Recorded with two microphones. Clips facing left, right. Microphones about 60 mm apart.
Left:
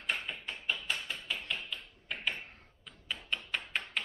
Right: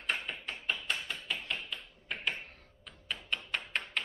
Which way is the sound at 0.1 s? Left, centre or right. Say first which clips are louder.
Right 1 dB; centre.